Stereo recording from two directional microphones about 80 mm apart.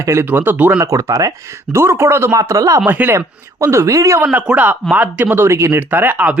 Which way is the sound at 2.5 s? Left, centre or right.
Right.